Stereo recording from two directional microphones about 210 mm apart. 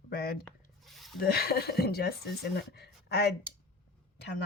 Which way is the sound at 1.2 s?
45° left (ahead or behind).